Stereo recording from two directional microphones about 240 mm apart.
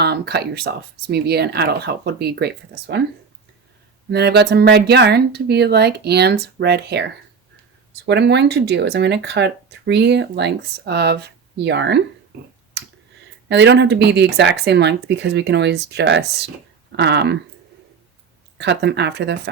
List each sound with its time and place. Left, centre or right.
0.0 s speech: right
4.1 s speech: right
13.5 s speech: right
18.5 s speech: right